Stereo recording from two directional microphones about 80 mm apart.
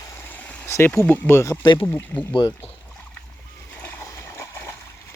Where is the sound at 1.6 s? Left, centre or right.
Left.